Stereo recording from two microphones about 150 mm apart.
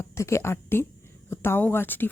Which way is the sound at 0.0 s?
20° left (ahead or behind).